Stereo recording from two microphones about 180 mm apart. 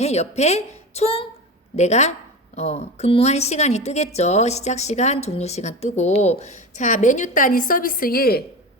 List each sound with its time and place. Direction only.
0.0 s speech: 35° left (ahead or behind); by 8.4 s 60° left (ahead or behind)